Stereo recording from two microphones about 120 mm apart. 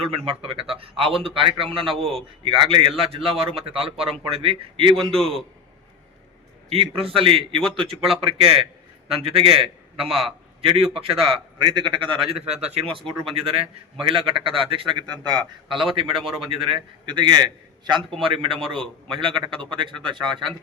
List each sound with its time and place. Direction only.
0.0 s a man's voice: 50° right (ahead or behind)
5.1 s a man's voice: 5° left (ahead or behind)
6.7 s a man's voice: 50° right (ahead or behind)
11.6 s a man's voice: 40° right (ahead or behind)